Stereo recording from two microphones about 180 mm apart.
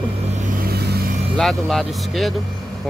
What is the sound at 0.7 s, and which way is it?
Vehicle, 65° right (ahead or behind).